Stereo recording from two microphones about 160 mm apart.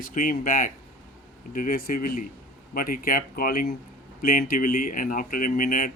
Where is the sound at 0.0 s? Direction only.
60° left (ahead or behind).